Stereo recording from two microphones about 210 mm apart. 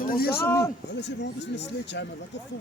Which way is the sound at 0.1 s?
45° left (ahead or behind).